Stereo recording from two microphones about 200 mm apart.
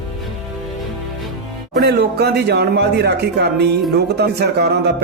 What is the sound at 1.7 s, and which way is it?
Speech, 55° right (ahead or behind).